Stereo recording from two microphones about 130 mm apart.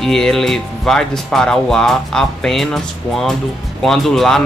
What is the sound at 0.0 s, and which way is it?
Speech, 5° left (ahead or behind).